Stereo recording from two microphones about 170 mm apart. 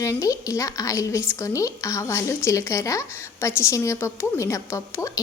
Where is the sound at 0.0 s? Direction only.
20° left (ahead or behind).